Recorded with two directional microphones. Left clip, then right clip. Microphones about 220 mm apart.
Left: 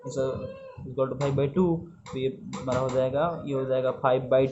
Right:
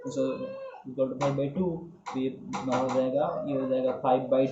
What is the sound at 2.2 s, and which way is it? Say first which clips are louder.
Speech: left 2 dB; 35° left (ahead or behind).